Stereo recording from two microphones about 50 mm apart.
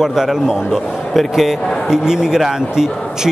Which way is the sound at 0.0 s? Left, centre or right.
Centre.